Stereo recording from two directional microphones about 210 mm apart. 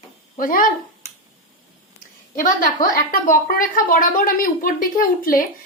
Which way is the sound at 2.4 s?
40° left (ahead or behind).